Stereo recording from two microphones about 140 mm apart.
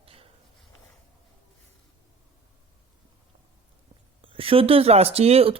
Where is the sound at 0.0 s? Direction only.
40° right (ahead or behind).